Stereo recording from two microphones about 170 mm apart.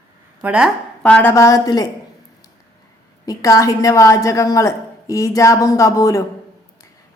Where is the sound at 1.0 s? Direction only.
10° left (ahead or behind).